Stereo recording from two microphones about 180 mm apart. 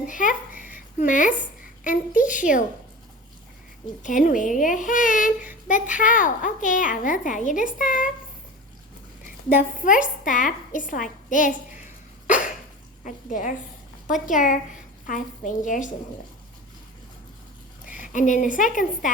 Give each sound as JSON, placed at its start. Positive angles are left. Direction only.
{"t": 0.0, "sound": "a sound", "side_deg": 45}
{"t": 2.3, "sound": "a child's voice", "side_deg": 45}
{"t": 4.0, "sound": "a child's voice", "side_deg": 45}
{"t": 9.8, "sound": "a child's voice", "side_deg": 45}
{"t": 13.1, "sound": "a child's voice", "side_deg": 50}
{"t": 17.8, "sound": "a woman's voice", "side_deg": 45}